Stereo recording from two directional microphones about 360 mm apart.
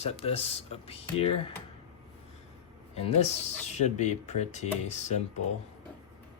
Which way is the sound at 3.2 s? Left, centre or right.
Centre.